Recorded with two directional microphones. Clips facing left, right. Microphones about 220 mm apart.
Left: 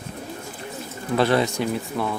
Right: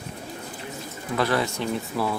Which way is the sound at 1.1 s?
25° left (ahead or behind).